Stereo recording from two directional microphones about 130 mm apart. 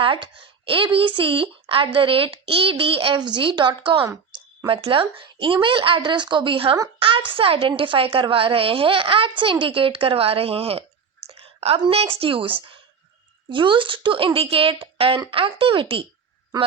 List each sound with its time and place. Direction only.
0.0 s a woman's voice: 40° right (ahead or behind)